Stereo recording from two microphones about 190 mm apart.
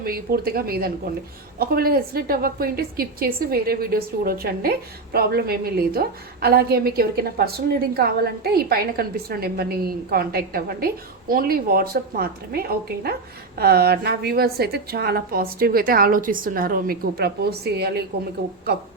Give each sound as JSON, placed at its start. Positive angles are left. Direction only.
{"t": 0.0, "sound": "a woman's voice", "side_deg": -55}